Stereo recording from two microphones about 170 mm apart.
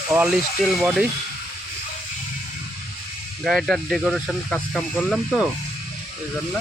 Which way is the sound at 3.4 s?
Centre (ahead or behind).